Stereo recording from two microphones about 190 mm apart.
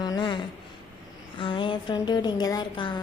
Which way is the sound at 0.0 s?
25° left (ahead or behind).